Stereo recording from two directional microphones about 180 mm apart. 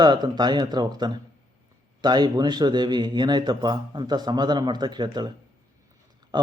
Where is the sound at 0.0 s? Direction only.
25° right (ahead or behind).